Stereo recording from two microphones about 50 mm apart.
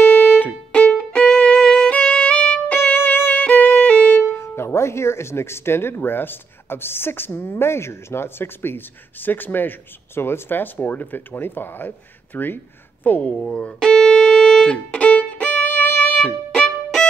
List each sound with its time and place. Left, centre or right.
0.0 s music: left
0.7 s music: left
1.6 s music: centre
1.9 s violin: left
4.3 s speech: left
13.4 s music: left